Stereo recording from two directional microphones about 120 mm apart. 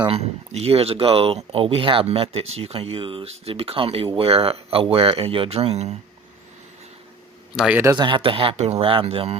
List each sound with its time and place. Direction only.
0.1 s speech: 60° right (ahead or behind)
7.5 s speech: 5° right (ahead or behind)
7.9 s speech: 40° right (ahead or behind)